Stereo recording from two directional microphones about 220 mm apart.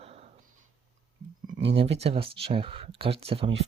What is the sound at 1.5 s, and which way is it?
Speech, 50° right (ahead or behind).